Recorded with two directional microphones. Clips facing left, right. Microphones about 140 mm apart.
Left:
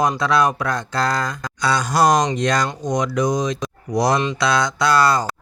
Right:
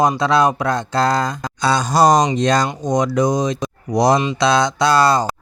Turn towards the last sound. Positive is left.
turn(degrees=-25)  # may be behind; listen again after turning